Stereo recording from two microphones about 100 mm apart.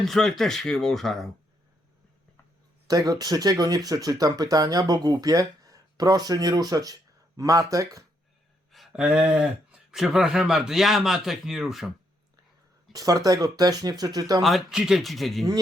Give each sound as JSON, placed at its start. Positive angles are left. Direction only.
{"t": 0.0, "sound": "speech", "side_deg": 5}
{"t": 2.8, "sound": "speech", "side_deg": -40}
{"t": 8.7, "sound": "speech", "side_deg": -5}
{"t": 12.9, "sound": "speech", "side_deg": -35}
{"t": 14.4, "sound": "speech", "side_deg": -5}